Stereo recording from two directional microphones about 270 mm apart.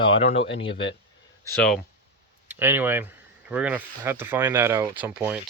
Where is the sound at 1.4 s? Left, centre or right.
Centre.